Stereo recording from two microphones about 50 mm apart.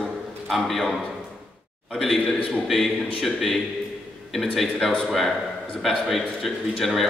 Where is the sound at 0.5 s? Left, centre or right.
Centre.